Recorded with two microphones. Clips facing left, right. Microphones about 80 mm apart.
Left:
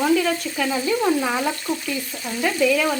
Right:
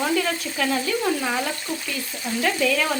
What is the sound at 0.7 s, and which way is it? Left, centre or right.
Frying, centre.